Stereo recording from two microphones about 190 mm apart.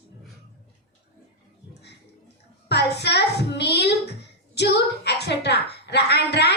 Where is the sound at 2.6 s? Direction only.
60° left (ahead or behind).